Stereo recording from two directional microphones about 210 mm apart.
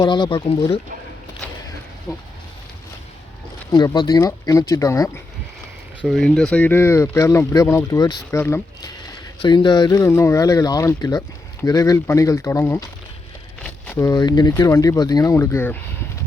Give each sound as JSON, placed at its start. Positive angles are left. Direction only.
{"t": 0.0, "sound": "speech", "side_deg": 20}
{"t": 2.1, "sound": "speech", "side_deg": 15}
{"t": 3.7, "sound": "speech", "side_deg": 20}
{"t": 6.1, "sound": "speech", "side_deg": 0}
{"t": 13.8, "sound": "speech", "side_deg": 10}